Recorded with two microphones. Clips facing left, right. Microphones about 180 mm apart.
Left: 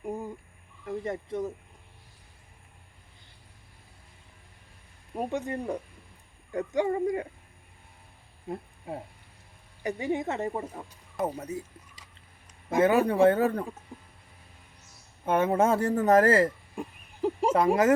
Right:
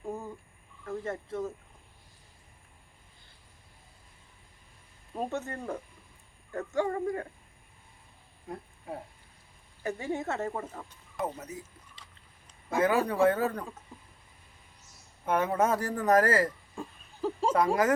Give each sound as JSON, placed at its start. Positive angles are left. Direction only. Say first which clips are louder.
{"t": 0.0, "sound": "a sound", "louder": "left 3 dB", "side_deg": 15}
{"t": 0.9, "sound": "speech", "louder": "left 3 dB", "side_deg": 15}
{"t": 5.1, "sound": "speech", "louder": "left 3 dB", "side_deg": 15}
{"t": 8.5, "sound": "a man's voice", "louder": "left 5 dB", "side_deg": 25}
{"t": 9.8, "sound": "speech", "louder": "left 3 dB", "side_deg": 15}
{"t": 11.3, "sound": "a man's voice", "louder": "left 6 dB", "side_deg": 30}
{"t": 12.7, "sound": "a man's voice", "louder": "left 4 dB", "side_deg": 20}
{"t": 15.3, "sound": "speech", "louder": "left 3 dB", "side_deg": 25}